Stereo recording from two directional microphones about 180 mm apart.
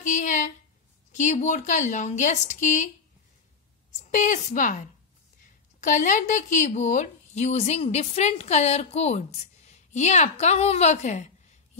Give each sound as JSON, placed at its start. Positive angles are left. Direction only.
{"t": 0.0, "sound": "a sound", "side_deg": 45}
{"t": 1.1, "sound": "speech", "side_deg": 40}
{"t": 4.0, "sound": "a woman's voice", "side_deg": 45}